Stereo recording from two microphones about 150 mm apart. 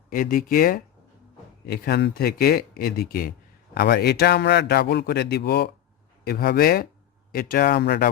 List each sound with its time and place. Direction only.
0.1 s speech: 70° left (ahead or behind)
1.6 s a man's voice: 90° left